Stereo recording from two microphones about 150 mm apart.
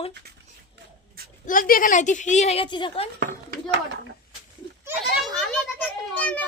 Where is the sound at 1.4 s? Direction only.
65° left (ahead or behind); by 3.0 s 35° left (ahead or behind).